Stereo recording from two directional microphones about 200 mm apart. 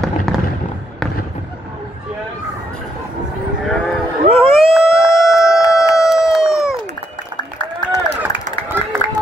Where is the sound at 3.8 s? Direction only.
5° right (ahead or behind).